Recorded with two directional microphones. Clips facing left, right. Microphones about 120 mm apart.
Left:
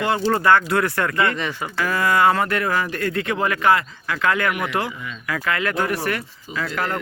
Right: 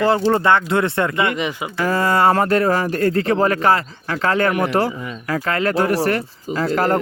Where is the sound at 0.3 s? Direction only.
25° right (ahead or behind).